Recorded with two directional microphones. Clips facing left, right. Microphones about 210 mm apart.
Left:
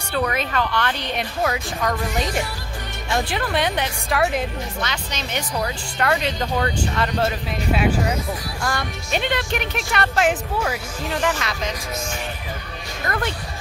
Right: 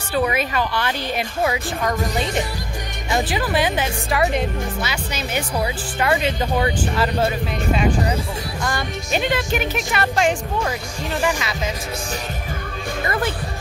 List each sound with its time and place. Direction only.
0.1 s a woman's voice: 5° right (ahead or behind)
11.1 s speech: 10° right (ahead or behind)
13.0 s speech: 5° right (ahead or behind)